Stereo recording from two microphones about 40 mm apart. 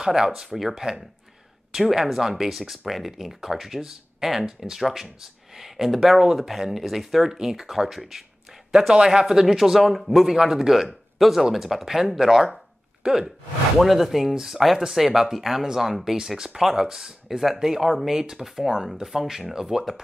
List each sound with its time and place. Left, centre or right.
0.0 s speech: centre
8.7 s speech: centre
13.0 s a sound: centre
13.7 s speech: centre